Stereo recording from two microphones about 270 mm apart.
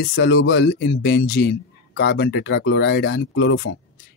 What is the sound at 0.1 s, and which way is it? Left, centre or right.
Speech, left.